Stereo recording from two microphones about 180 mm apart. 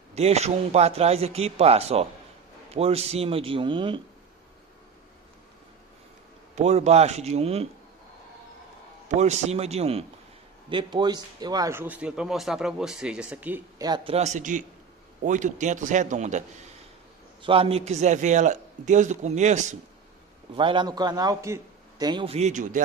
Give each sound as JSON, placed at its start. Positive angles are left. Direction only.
{"t": 0.1, "sound": "a man's voice", "side_deg": -35}
{"t": 6.5, "sound": "a man's voice", "side_deg": -40}
{"t": 9.1, "sound": "a man's voice", "side_deg": -40}
{"t": 13.7, "sound": "a man's voice", "side_deg": -25}
{"t": 14.1, "sound": "a man's voice", "side_deg": -40}
{"t": 17.4, "sound": "a man's voice", "side_deg": -30}
{"t": 20.5, "sound": "a man's voice", "side_deg": -25}